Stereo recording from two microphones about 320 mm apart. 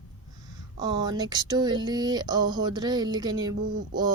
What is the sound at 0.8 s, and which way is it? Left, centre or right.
Speech, centre.